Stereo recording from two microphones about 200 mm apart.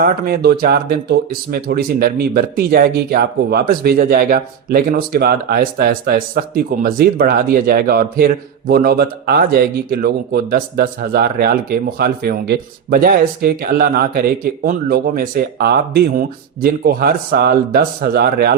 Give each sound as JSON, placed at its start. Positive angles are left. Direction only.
{"t": 0.0, "sound": "speech", "side_deg": -50}